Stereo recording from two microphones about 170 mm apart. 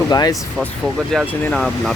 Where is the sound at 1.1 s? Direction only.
Centre (ahead or behind).